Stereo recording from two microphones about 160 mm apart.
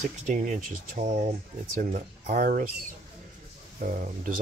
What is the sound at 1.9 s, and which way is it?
Speech, 65° right (ahead or behind).